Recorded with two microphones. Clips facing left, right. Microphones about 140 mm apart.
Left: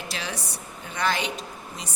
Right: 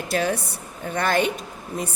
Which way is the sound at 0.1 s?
50° right (ahead or behind).